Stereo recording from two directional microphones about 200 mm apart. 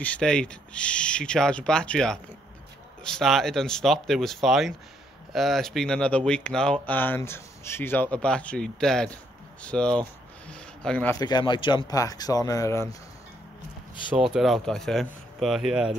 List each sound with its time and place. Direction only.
0.0 s speech: 5° left (ahead or behind)
11.1 s speech: 20° left (ahead or behind)
14.1 s speech: 5° right (ahead or behind)